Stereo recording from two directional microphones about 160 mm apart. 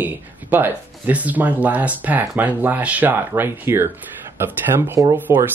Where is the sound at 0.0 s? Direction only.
10° right (ahead or behind).